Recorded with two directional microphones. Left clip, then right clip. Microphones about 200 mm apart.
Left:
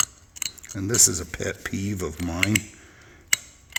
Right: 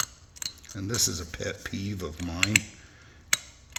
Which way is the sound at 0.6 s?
50° left (ahead or behind).